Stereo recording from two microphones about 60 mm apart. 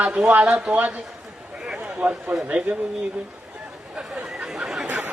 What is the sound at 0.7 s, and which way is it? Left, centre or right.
Speech, right.